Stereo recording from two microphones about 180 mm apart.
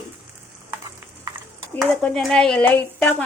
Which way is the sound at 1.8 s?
Centre (ahead or behind).